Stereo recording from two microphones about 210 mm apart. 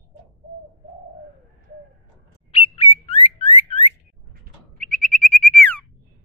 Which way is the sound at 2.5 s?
25° left (ahead or behind).